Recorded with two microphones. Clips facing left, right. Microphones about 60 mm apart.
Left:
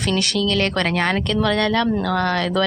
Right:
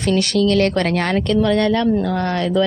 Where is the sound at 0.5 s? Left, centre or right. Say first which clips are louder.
Right 3 dB; left.